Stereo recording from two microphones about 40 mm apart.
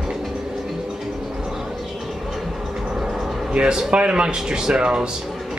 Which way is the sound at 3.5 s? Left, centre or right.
Right.